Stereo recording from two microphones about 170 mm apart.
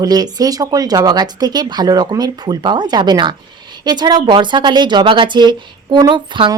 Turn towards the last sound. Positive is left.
turn(degrees=-30)  # may be behind; listen again after turning